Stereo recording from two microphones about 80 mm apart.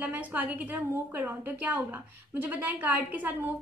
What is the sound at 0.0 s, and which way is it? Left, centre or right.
A woman's voice, centre.